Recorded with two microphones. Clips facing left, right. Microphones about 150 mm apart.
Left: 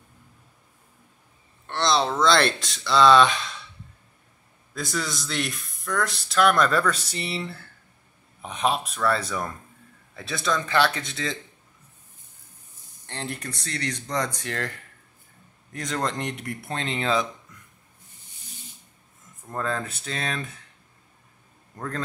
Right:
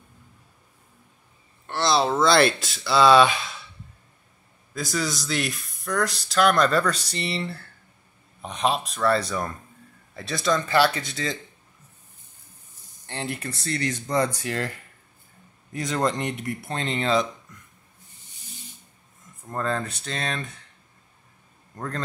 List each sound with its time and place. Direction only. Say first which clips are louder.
1.7 s speech: right 1 dB; 5° right (ahead or behind)
4.7 s speech: right 2 dB; centre (ahead or behind)
13.0 s speech: right 2 dB; 5° right (ahead or behind)
15.7 s speech: right 3 dB; 5° right (ahead or behind)
19.5 s speech: right 2 dB; centre (ahead or behind)